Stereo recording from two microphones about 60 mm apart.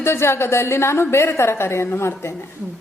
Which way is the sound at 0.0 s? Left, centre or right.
Left.